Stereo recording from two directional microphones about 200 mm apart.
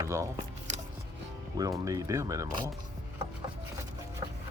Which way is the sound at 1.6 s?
15° right (ahead or behind).